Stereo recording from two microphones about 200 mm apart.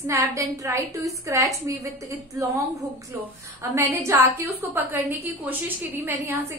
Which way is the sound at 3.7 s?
15° right (ahead or behind).